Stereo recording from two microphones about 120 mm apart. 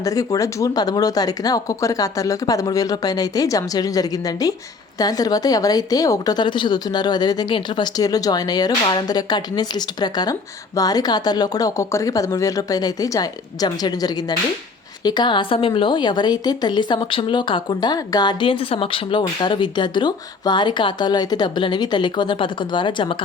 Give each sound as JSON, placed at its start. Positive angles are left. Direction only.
{"t": 0.0, "sound": "a woman's voice", "side_deg": 30}